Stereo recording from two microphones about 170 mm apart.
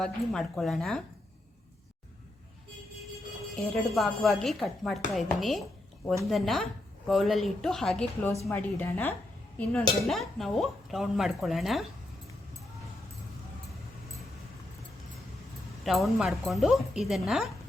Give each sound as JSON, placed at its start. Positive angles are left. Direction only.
{"t": 0.0, "sound": "speech", "side_deg": 0}
{"t": 3.5, "sound": "speech", "side_deg": 0}
{"t": 8.4, "sound": "a woman's voice", "side_deg": 15}
{"t": 15.8, "sound": "speech", "side_deg": 0}